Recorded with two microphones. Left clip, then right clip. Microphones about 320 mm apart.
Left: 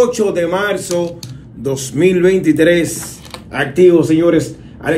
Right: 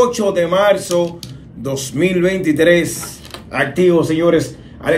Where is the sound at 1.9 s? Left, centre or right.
Centre.